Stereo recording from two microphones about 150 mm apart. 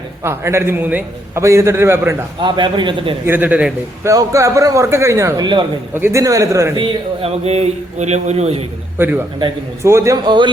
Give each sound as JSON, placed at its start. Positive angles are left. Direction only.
{"t": 0.2, "sound": "a man's voice", "side_deg": -20}
{"t": 2.4, "sound": "a man's voice", "side_deg": -30}
{"t": 3.2, "sound": "a man's voice", "side_deg": -10}
{"t": 4.1, "sound": "a man's voice", "side_deg": -20}
{"t": 6.7, "sound": "a man's voice", "side_deg": -35}
{"t": 9.0, "sound": "a man's voice", "side_deg": -15}